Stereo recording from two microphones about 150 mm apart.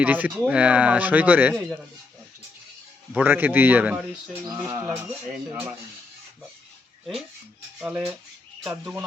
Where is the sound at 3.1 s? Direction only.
10° right (ahead or behind).